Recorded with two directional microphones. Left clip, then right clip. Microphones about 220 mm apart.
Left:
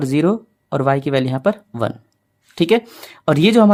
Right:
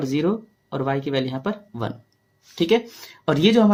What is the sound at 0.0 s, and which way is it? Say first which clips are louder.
Speech: left 5 dB; 50° left (ahead or behind).